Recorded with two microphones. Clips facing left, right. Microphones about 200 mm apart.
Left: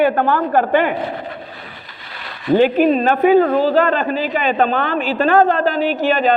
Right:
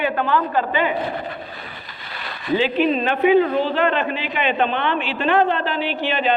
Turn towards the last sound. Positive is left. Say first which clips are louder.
# left 5 dB
turn(degrees=45)  # may be behind; listen again after turning